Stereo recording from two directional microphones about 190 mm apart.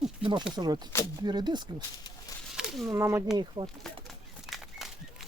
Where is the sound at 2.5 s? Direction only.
5° right (ahead or behind).